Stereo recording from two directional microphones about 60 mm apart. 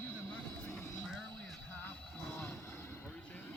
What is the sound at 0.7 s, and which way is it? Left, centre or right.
Vehicle, left.